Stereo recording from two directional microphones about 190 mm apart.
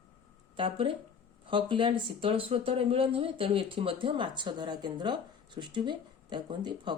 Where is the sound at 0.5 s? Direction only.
25° right (ahead or behind).